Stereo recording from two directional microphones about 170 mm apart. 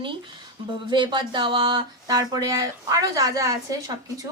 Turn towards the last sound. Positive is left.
turn(degrees=-20)  # may be behind; listen again after turning